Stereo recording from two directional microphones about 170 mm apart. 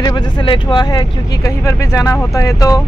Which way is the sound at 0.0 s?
25° left (ahead or behind).